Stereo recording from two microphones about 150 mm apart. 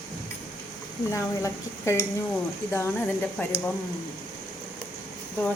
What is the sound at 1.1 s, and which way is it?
Speech, 20° left (ahead or behind).